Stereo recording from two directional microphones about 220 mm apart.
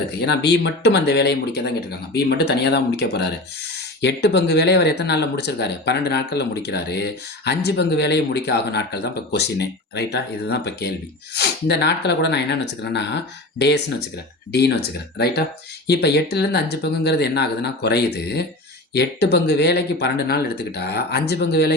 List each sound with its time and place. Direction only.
0.2 s speech: 50° left (ahead or behind)